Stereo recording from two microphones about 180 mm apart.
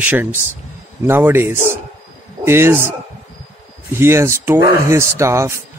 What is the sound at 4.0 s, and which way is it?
Speech, 15° right (ahead or behind).